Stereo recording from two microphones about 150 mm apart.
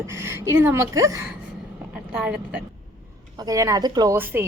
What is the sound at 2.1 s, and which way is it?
Speech, 5° right (ahead or behind).